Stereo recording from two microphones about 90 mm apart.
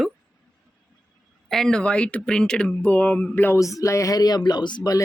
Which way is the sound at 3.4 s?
35° left (ahead or behind).